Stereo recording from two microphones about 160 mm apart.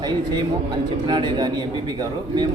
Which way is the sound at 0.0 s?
25° right (ahead or behind).